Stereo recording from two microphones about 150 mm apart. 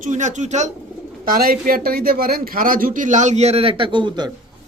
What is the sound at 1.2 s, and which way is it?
A man's voice, 75° right (ahead or behind).